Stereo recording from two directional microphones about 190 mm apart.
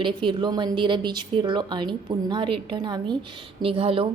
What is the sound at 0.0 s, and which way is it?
A woman's voice, 25° right (ahead or behind).